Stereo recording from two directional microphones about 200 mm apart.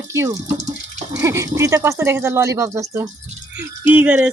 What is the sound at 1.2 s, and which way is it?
Speech, 15° right (ahead or behind).